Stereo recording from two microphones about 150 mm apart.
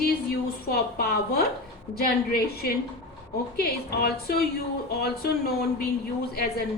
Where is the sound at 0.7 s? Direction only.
90° left.